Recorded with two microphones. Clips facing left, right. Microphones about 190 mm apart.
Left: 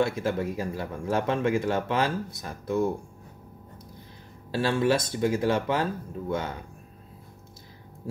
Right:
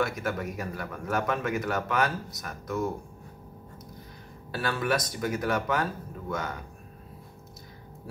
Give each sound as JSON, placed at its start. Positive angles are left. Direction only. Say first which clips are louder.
{"t": 0.0, "sound": "speech", "louder": "left 4 dB", "side_deg": 30}
{"t": 4.5, "sound": "speech", "louder": "left 5 dB", "side_deg": 30}